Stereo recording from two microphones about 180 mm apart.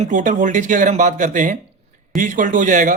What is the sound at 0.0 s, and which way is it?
Speech, 45° right (ahead or behind).